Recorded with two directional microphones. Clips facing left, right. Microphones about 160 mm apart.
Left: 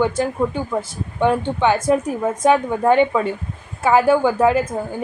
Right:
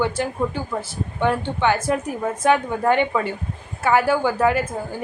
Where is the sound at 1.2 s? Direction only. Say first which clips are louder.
Left 4 dB; 20° left (ahead or behind).